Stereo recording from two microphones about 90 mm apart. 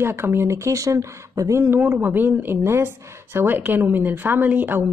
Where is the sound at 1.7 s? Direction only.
20° right (ahead or behind).